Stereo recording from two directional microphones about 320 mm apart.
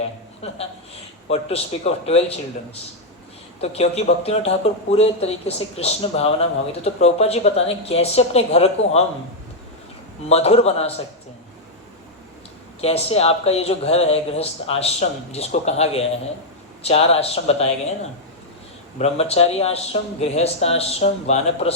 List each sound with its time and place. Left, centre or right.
1.3 s speech: centre
3.6 s speech: centre
10.2 s speech: centre
12.8 s speech: centre
18.9 s speech: centre